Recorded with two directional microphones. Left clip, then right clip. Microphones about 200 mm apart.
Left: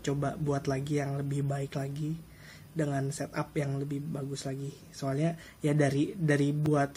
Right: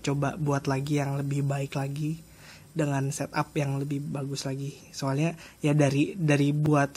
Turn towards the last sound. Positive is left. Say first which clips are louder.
# right 4 dB
turn(degrees=-40)  # may be behind; listen again after turning